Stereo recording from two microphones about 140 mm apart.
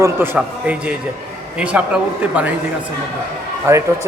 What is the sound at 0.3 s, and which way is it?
A man's voice, 10° right (ahead or behind).